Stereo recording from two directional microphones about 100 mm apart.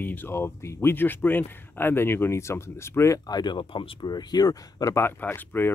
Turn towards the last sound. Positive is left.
turn(degrees=20)  # may be behind; listen again after turning